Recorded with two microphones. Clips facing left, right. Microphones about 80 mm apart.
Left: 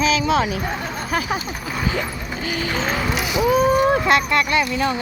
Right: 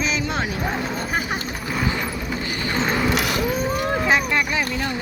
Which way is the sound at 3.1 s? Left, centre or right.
Right.